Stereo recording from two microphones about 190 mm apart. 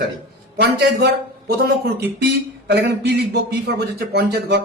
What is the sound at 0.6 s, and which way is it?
A man's voice, 60° right (ahead or behind).